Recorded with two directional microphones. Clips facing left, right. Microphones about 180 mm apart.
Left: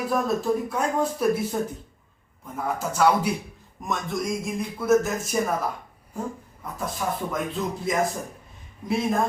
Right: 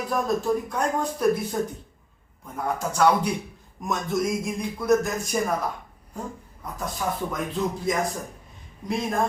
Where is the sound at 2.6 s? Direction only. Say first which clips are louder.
Even; 5° left (ahead or behind).